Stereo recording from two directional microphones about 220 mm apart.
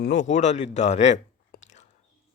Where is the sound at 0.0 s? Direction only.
35° left (ahead or behind).